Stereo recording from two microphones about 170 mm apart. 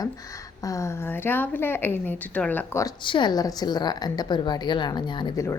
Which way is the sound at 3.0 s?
25° left (ahead or behind).